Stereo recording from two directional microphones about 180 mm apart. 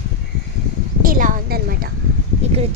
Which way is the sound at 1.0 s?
50° right (ahead or behind).